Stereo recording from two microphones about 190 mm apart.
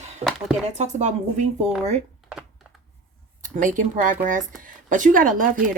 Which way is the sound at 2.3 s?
Centre (ahead or behind).